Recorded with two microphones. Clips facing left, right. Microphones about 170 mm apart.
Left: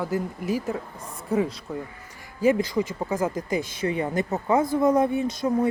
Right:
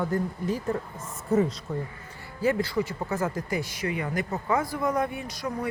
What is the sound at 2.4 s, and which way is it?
Speech, 15° left (ahead or behind).